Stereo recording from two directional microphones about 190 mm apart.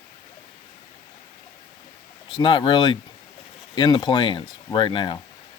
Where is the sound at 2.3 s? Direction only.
25° left (ahead or behind).